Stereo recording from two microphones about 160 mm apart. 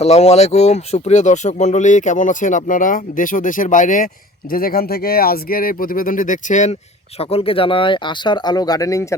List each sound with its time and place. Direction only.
0.0 s speech: 40° left (ahead or behind)
4.5 s speech: 65° left (ahead or behind); by 9.1 s 20° left (ahead or behind)